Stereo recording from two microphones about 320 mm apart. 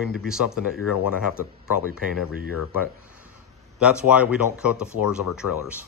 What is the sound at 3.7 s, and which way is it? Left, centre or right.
Speech, centre.